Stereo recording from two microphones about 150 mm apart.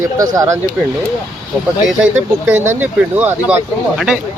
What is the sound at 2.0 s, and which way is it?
A man's voice, 15° right (ahead or behind).